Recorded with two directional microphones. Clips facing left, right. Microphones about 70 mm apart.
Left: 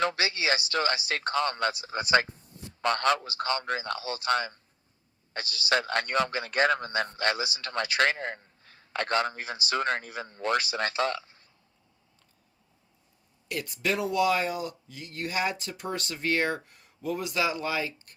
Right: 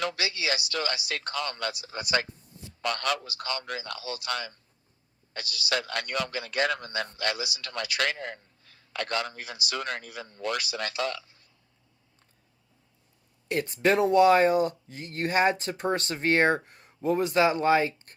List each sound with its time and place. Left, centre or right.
0.0 s a man's voice: left
13.5 s speech: right